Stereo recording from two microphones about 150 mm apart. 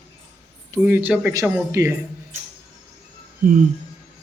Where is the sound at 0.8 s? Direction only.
10° right (ahead or behind).